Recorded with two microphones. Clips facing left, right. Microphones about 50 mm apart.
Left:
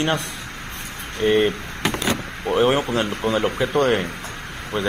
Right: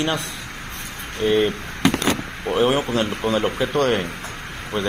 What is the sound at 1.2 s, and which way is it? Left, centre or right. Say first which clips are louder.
Speech: left 1 dB; left.